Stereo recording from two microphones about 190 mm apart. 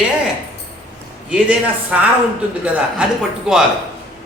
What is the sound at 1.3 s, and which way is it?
A man's voice, 5° right (ahead or behind).